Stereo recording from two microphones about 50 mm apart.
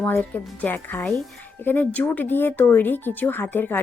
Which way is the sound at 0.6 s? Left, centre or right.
Left.